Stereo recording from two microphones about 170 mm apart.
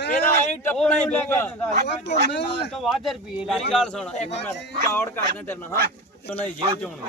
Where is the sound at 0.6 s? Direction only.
10° left (ahead or behind).